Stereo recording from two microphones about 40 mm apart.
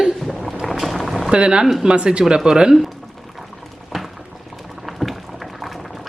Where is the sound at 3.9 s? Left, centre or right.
Centre.